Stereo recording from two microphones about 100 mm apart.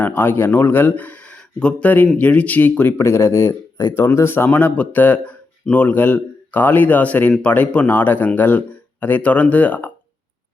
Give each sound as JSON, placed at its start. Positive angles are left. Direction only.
{"t": 0.0, "sound": "speech", "side_deg": 20}
{"t": 3.0, "sound": "speech", "side_deg": 25}